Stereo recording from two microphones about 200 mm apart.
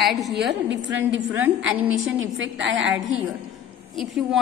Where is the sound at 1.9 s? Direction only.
85° right.